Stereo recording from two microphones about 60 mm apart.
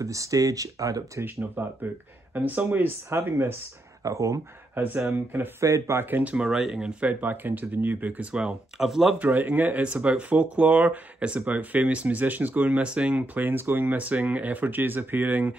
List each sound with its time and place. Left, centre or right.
0.0 s speech: right
1.2 s speech: right
4.0 s speech: right
4.7 s speech: right
5.6 s speech: right
5.9 s speech: right
6.3 s speech: centre
7.1 s speech: right
8.3 s speech: centre
9.2 s speech: right
13.1 s speech: right